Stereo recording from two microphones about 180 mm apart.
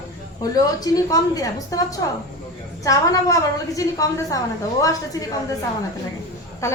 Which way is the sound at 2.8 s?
20° left (ahead or behind).